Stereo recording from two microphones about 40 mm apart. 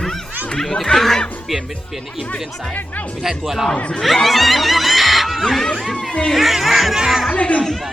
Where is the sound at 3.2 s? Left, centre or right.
Centre.